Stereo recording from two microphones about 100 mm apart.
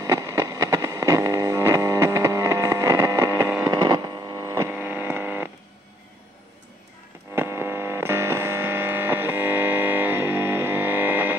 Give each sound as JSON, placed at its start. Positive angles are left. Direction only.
{"t": 0.0, "sound": "music", "side_deg": -30}
{"t": 3.3, "sound": "hum", "side_deg": -25}
{"t": 7.3, "sound": "mains hum", "side_deg": -25}